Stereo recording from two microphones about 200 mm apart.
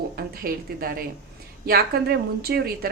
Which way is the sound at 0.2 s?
50° right (ahead or behind).